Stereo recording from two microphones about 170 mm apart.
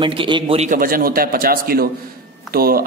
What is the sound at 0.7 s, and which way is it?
A man's voice, 55° right (ahead or behind).